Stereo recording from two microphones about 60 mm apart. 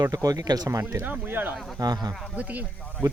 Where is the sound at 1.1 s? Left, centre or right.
Right.